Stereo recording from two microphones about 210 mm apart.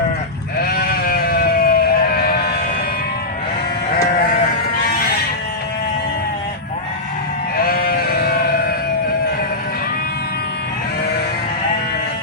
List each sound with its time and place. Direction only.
0.6 s sheep: 45° left (ahead or behind)
7.7 s sheep: 45° left (ahead or behind)